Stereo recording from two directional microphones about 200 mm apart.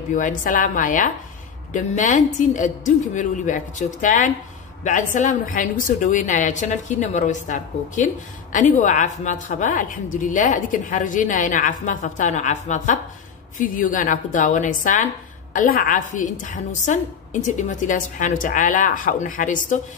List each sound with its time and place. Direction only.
0.1 s a woman's voice: 40° left (ahead or behind)